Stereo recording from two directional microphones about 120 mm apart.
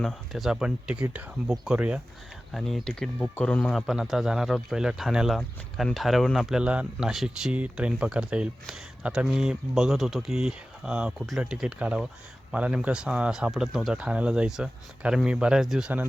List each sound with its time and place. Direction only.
0.0 s speech: centre (ahead or behind)